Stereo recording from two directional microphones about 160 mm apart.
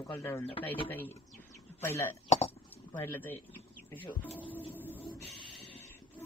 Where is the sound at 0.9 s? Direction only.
15° left (ahead or behind).